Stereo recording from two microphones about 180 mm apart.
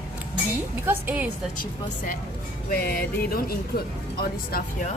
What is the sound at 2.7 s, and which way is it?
Speech, 55° left (ahead or behind).